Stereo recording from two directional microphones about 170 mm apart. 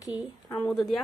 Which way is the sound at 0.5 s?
5° left (ahead or behind).